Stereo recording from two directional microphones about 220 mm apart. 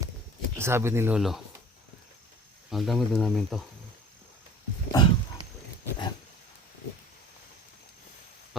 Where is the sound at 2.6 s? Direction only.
Centre (ahead or behind).